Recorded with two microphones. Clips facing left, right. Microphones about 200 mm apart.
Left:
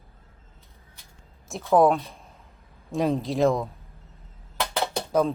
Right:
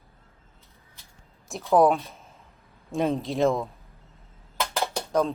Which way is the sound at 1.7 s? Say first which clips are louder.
Left 1 dB; centre (ahead or behind).